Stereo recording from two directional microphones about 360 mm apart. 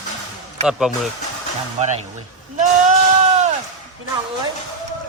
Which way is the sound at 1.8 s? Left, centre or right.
Centre.